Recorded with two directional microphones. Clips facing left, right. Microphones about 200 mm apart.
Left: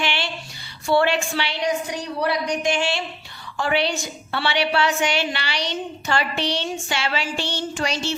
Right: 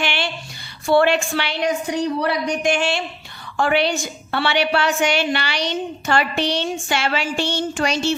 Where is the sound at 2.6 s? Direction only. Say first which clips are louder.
Right 3 dB; 50° right (ahead or behind).